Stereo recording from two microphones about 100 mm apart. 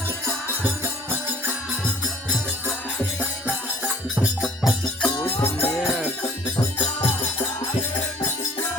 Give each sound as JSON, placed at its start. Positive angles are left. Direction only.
{"t": 4.2, "sound": "music", "side_deg": 0}
{"t": 5.2, "sound": "music", "side_deg": 25}